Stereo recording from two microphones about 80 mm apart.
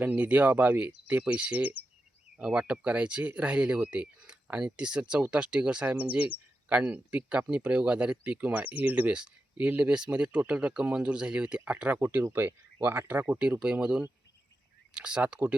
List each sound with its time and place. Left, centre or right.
0.0 s speech: centre
11.9 s speech: right